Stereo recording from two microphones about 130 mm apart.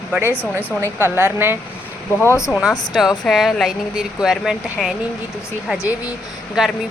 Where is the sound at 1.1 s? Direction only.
15° right (ahead or behind).